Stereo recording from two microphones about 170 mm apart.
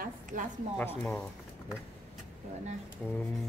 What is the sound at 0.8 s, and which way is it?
Speech, 5° left (ahead or behind).